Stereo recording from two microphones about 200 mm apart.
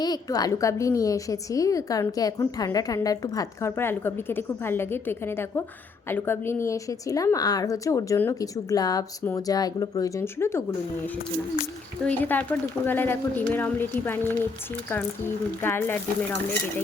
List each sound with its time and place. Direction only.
0.0 s a woman's voice: 20° left (ahead or behind)
12.0 s a woman's voice: 10° left (ahead or behind)
15.6 s a woman's voice: 10° left (ahead or behind)